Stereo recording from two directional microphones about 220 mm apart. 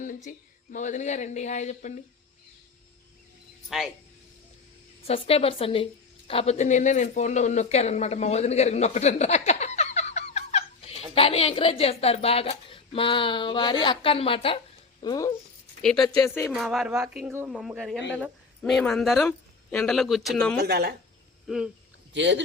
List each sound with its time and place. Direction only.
0.0 s speech: 35° left (ahead or behind)
3.7 s speech: centre (ahead or behind)
5.0 s a woman's voice: 25° left (ahead or behind)
15.8 s speech: 5° left (ahead or behind)
16.1 s speech: 15° left (ahead or behind)
16.5 s speech: centre (ahead or behind)
20.6 s speech: 50° right (ahead or behind)
21.4 s speech: centre (ahead or behind)
22.1 s speech: 55° right (ahead or behind)